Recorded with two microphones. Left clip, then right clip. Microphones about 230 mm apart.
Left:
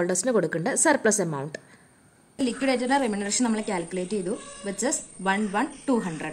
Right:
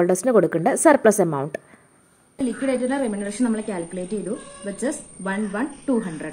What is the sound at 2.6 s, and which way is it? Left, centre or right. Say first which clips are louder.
A woman's voice: even; left.